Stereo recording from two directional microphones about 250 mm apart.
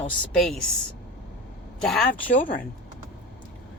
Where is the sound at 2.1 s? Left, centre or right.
Left.